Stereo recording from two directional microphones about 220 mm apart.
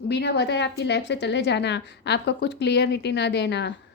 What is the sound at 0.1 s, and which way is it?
A woman's voice, 50° left (ahead or behind).